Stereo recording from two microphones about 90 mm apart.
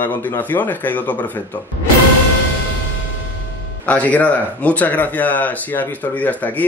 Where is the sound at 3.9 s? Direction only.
15° left (ahead or behind).